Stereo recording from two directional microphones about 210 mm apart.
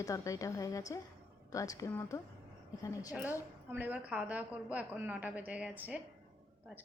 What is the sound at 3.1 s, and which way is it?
A woman's voice, 10° right (ahead or behind).